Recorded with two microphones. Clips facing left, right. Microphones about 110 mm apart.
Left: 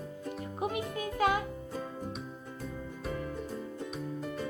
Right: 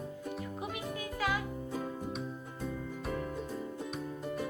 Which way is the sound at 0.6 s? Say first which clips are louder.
Left 10 dB; 40° left (ahead or behind).